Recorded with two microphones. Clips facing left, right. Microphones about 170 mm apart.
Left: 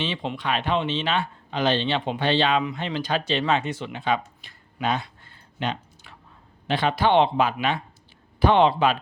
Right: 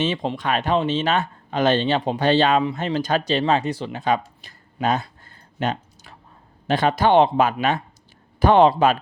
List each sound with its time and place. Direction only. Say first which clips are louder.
0.0 s speech: right 5 dB; 45° right (ahead or behind)